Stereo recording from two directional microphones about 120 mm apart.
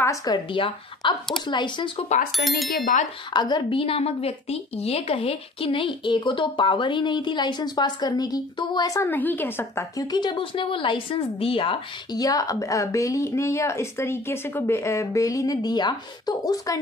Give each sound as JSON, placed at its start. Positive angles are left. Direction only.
{"t": 0.0, "sound": "speech", "side_deg": 30}
{"t": 2.3, "sound": "speech", "side_deg": 0}
{"t": 3.3, "sound": "speech", "side_deg": 40}
{"t": 3.8, "sound": "a woman's voice", "side_deg": 55}
{"t": 9.1, "sound": "a woman's voice", "side_deg": 15}
{"t": 12.1, "sound": "a woman's voice", "side_deg": 30}